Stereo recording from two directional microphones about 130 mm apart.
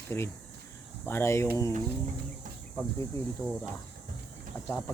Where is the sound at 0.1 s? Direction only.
25° left (ahead or behind).